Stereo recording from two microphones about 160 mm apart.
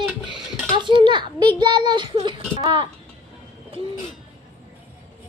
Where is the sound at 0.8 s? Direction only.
30° right (ahead or behind).